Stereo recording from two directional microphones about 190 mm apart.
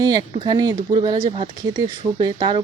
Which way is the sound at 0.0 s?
20° right (ahead or behind).